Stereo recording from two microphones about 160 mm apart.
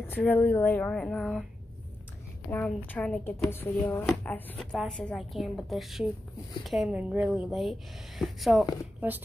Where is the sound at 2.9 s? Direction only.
10° left (ahead or behind).